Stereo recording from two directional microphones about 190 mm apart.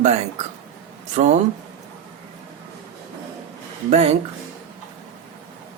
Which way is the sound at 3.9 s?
35° right (ahead or behind).